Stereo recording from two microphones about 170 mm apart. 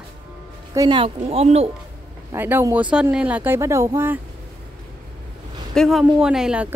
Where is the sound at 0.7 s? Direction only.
25° right (ahead or behind).